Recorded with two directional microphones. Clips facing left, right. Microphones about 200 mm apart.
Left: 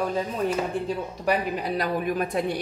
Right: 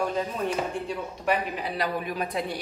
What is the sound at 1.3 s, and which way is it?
A woman's voice, 45° left (ahead or behind).